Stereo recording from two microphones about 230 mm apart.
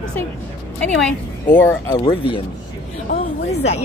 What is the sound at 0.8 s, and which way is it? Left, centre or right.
Speech, centre.